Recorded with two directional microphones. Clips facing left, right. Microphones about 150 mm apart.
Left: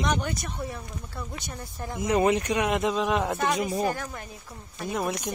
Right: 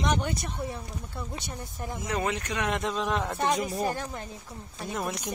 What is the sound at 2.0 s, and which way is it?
Speech, 20° left (ahead or behind).